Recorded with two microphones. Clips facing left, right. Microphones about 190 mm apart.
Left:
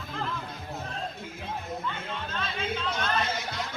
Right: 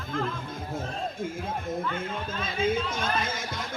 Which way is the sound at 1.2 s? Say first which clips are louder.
Right 5 dB; 45° right (ahead or behind).